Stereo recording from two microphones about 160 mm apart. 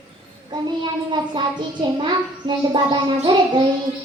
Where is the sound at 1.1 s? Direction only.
30° right (ahead or behind).